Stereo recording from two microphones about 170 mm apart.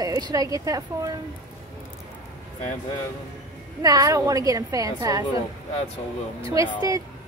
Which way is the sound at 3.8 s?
20° right (ahead or behind).